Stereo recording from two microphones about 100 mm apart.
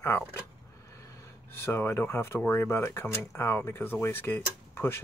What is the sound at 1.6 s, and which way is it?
Speech, 25° left (ahead or behind).